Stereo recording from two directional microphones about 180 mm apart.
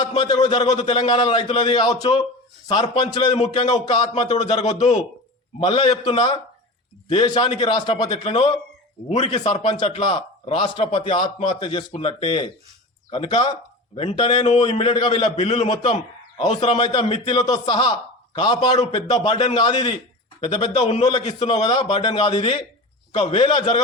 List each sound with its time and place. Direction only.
0.1 s a man's voice: 25° left (ahead or behind)
9.0 s a man's voice: 40° left (ahead or behind)
9.3 s a man's voice: 25° left (ahead or behind)
11.9 s a man's voice: 35° left (ahead or behind)
12.2 s a man's voice: 25° left (ahead or behind)